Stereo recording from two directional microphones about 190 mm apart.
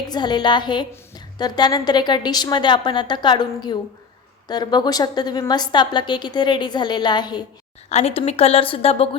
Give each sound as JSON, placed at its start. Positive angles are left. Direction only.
{"t": 0.1, "sound": "a woman's voice", "side_deg": 25}
{"t": 7.9, "sound": "a woman's voice", "side_deg": 35}